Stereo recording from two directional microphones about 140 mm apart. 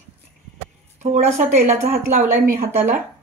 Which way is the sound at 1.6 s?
65° right (ahead or behind).